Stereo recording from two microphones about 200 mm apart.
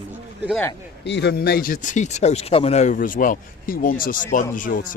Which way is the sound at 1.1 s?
60° left (ahead or behind).